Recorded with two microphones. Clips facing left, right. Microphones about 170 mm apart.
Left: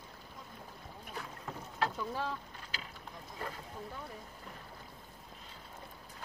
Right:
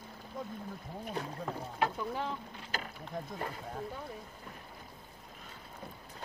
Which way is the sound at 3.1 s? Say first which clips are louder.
Right 16 dB; 55° right (ahead or behind).